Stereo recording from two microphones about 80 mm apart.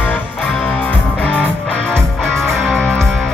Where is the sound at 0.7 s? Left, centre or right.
Centre.